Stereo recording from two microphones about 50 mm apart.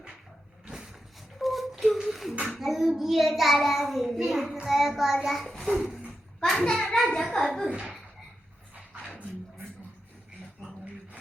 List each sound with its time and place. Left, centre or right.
1.4 s a sound: centre
2.6 s a child's voice: centre
6.6 s a child's voice: centre
7.7 s speech: centre